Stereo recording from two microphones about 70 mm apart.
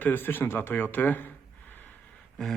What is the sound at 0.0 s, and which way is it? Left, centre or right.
Speech, left.